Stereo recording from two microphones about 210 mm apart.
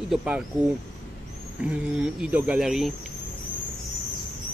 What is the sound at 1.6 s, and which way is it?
Speech, 5° right (ahead or behind).